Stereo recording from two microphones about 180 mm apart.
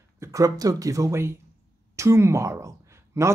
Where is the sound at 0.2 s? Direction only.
20° right (ahead or behind).